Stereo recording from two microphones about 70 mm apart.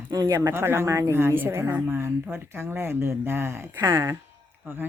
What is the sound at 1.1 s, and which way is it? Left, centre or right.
Speech, right.